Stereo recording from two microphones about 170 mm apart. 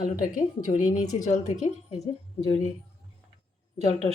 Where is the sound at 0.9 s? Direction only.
25° left (ahead or behind).